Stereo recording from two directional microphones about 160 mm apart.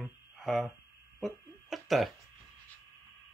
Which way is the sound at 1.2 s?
Centre (ahead or behind).